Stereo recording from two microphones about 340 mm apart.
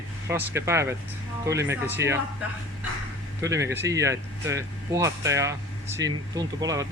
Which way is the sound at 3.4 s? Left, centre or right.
Centre.